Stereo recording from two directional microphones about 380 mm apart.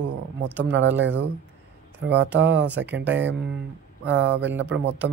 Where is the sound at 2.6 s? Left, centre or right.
Centre.